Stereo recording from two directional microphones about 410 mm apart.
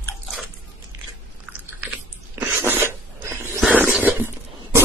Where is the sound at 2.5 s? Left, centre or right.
Centre.